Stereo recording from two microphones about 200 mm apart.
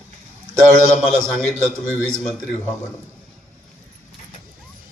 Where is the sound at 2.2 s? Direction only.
5° left (ahead or behind).